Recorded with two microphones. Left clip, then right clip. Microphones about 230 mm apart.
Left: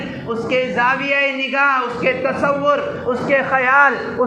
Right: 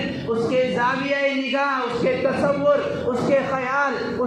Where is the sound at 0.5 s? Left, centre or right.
Left.